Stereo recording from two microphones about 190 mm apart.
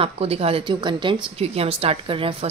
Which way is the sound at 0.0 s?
30° right (ahead or behind).